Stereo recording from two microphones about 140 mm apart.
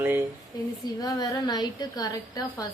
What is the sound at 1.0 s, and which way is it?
A woman's voice, 30° left (ahead or behind).